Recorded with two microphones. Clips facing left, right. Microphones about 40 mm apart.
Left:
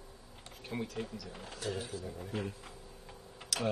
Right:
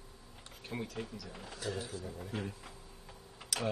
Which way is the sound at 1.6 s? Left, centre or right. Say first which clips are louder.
Left 1 dB; left.